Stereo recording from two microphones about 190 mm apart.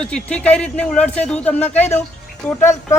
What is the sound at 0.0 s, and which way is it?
A woman's voice, 5° left (ahead or behind).